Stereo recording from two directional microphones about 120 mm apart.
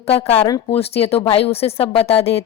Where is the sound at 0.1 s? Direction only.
55° left (ahead or behind).